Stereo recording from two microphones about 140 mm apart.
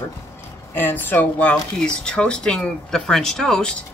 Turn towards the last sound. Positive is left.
turn(degrees=5)  # may be behind; listen again after turning